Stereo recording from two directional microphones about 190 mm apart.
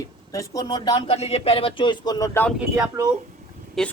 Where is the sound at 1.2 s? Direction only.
35° left (ahead or behind).